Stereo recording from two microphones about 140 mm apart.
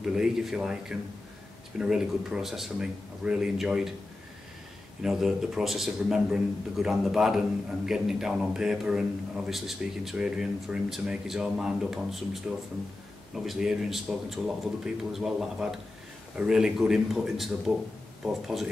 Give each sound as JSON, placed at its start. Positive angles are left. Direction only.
{"t": 0.0, "sound": "a man's voice", "side_deg": -5}
{"t": 5.0, "sound": "a man's voice", "side_deg": -5}